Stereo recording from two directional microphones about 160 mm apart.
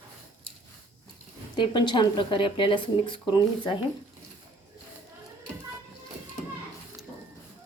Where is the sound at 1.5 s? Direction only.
30° left (ahead or behind).